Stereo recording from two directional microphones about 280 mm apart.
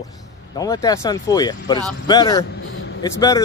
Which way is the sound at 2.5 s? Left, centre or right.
Left.